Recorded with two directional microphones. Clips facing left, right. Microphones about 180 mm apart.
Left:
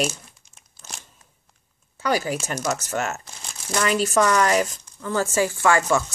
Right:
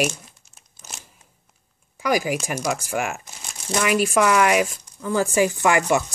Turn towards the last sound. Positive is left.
turn(degrees=-15)  # may be behind; listen again after turning